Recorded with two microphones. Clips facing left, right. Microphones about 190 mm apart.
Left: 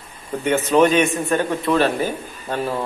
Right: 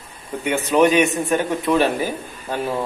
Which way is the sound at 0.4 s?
10° right (ahead or behind).